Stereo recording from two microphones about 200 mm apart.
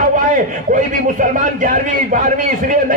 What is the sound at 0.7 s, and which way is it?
A man's voice, 40° right (ahead or behind).